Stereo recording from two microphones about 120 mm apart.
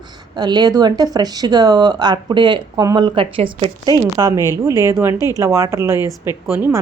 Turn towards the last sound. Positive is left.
turn(degrees=-20)  # may be behind; listen again after turning